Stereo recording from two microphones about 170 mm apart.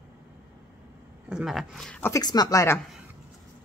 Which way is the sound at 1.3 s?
Centre (ahead or behind).